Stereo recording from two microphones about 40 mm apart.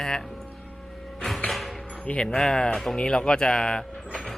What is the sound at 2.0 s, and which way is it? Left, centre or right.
Speech, left.